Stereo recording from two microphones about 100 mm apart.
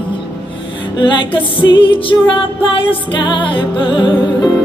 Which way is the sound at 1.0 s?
55° left (ahead or behind).